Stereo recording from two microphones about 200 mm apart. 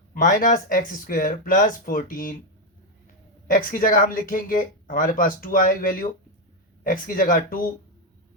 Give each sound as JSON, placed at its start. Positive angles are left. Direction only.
{"t": 0.1, "sound": "speech", "side_deg": 45}
{"t": 3.4, "sound": "speech", "side_deg": 45}